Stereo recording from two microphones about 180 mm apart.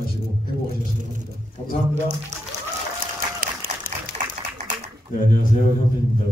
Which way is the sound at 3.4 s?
50° right (ahead or behind).